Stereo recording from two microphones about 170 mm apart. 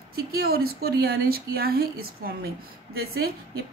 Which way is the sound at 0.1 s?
65° right (ahead or behind).